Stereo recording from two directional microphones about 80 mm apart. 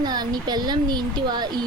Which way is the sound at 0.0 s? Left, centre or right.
Right.